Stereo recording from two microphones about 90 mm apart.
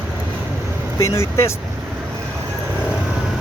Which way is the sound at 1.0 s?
30° left (ahead or behind).